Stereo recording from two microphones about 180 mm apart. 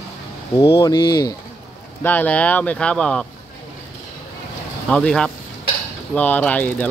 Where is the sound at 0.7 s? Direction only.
20° left (ahead or behind).